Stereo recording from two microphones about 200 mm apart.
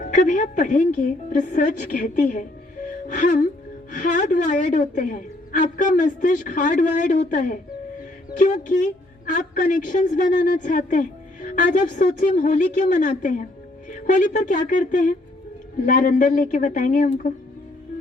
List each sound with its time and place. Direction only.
0.0 s a woman's voice: 40° left (ahead or behind)